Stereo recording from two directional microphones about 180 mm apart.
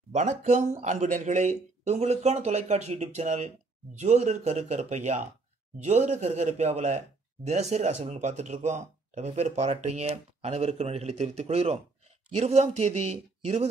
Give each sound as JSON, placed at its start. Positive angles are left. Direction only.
{"t": 0.1, "sound": "speech", "side_deg": -40}